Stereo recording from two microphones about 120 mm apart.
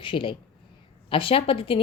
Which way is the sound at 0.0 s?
45° left (ahead or behind).